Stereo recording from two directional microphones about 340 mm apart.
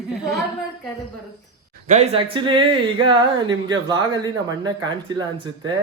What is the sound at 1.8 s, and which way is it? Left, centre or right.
Speech, centre.